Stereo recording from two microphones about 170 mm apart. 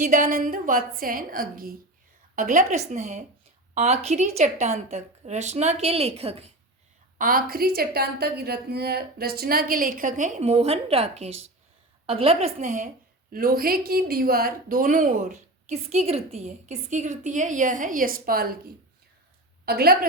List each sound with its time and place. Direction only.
0.0 s a woman's voice: 50° right (ahead or behind)
7.2 s a woman's voice: 60° right (ahead or behind)
13.3 s a woman's voice: 60° right (ahead or behind)
19.6 s a woman's voice: 65° right (ahead or behind)